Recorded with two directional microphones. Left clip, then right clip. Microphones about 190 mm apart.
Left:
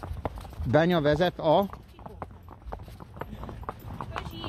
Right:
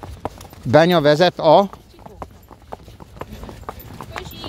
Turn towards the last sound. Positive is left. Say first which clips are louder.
# right 5 dB
turn(degrees=-50)  # may be behind; listen again after turning